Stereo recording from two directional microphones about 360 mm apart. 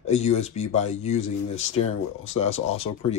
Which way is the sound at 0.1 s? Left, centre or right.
Centre.